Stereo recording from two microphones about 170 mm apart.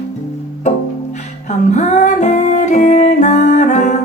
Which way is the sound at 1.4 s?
45° left (ahead or behind).